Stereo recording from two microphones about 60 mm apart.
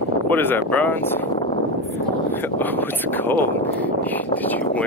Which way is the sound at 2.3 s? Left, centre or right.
Left.